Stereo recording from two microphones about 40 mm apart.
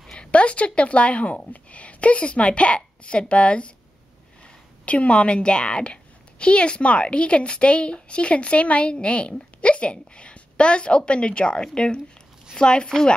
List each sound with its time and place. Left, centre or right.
0.1 s a sound: left
1.5 s speech: left
4.8 s a woman's voice: left